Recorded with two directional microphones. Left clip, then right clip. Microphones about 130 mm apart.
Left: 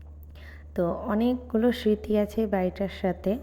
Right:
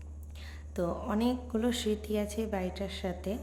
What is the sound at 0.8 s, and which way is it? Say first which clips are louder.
A woman's voice: left 6 dB; 30° left (ahead or behind).